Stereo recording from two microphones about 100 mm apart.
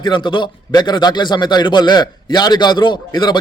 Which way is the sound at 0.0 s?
50° left (ahead or behind).